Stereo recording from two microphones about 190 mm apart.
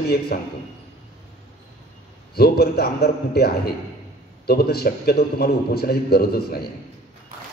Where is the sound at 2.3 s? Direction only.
55° left (ahead or behind).